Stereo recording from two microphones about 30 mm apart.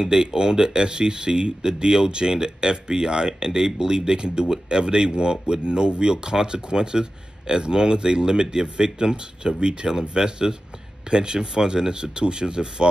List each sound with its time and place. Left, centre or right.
0.0 s speech: right